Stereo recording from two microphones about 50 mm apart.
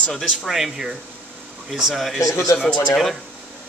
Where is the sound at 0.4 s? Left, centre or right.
Centre.